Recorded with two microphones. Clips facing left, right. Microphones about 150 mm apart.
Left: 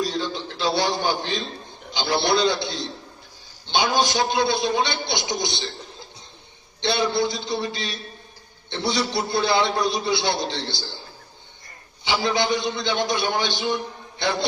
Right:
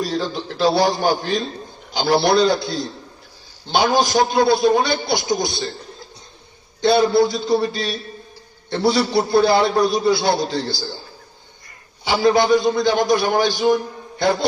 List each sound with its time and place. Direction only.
0.0 s a sound: 45° right (ahead or behind)
1.9 s a man's voice: 40° right (ahead or behind)
6.8 s a man's voice: 40° right (ahead or behind)
12.0 s a man's voice: 40° right (ahead or behind)